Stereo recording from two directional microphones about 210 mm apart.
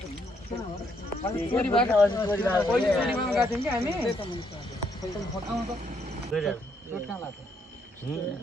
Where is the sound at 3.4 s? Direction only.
10° right (ahead or behind).